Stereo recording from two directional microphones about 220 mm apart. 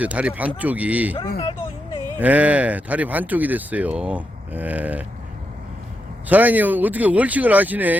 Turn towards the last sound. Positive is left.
turn(degrees=-5)  # may be behind; listen again after turning